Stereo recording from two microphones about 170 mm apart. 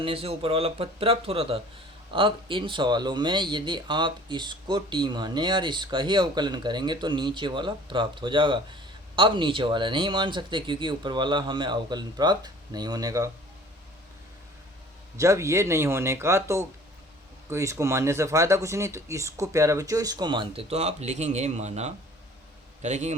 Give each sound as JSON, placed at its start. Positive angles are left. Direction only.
{"t": 0.0, "sound": "speech", "side_deg": -35}
{"t": 15.2, "sound": "speech", "side_deg": -15}